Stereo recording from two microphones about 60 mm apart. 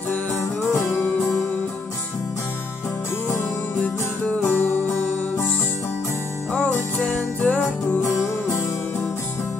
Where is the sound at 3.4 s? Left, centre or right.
Left.